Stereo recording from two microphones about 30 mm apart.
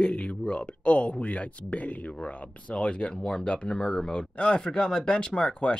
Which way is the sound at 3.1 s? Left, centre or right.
Left.